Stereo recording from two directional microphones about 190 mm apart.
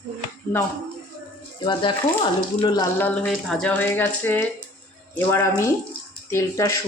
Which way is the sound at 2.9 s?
10° left (ahead or behind).